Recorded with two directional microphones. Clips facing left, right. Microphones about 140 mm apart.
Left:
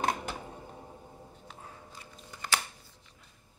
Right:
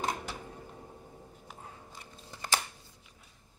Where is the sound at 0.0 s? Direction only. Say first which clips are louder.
Left 3 dB; 65° left (ahead or behind).